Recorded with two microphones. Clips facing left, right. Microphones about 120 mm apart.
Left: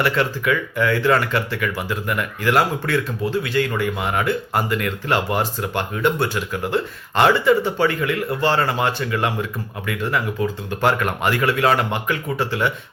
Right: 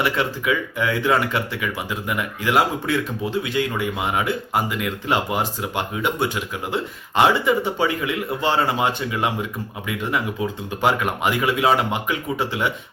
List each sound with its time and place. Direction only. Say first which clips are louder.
0.0 s speech: left 2 dB; 15° right (ahead or behind)